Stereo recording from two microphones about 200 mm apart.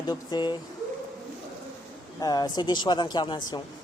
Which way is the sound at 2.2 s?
20° left (ahead or behind).